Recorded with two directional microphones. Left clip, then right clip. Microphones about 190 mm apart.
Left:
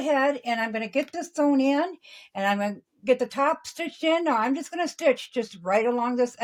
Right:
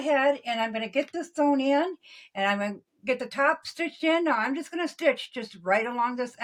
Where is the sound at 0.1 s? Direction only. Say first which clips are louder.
Even; 45° left (ahead or behind).